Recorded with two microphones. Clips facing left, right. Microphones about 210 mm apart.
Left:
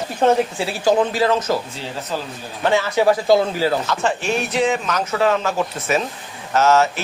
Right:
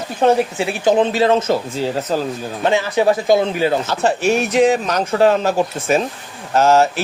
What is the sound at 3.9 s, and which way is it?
Speech, 40° right (ahead or behind).